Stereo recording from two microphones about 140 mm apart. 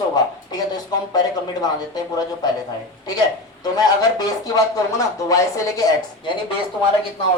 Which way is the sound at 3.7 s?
25° left (ahead or behind).